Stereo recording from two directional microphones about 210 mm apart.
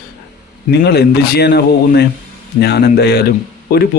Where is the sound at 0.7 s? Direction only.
50° left (ahead or behind).